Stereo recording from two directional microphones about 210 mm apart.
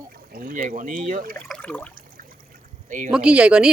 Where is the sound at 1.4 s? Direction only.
5° left (ahead or behind).